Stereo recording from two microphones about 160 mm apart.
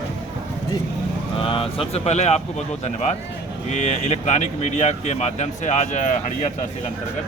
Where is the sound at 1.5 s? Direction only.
35° left (ahead or behind).